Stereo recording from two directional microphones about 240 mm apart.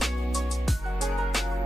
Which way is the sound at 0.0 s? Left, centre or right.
Centre.